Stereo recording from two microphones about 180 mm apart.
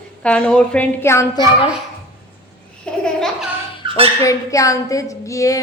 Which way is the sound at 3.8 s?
25° right (ahead or behind).